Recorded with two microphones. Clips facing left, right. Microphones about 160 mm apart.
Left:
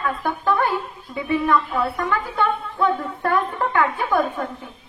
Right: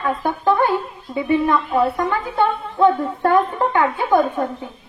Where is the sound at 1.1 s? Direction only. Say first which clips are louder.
Right 3 dB; 25° right (ahead or behind).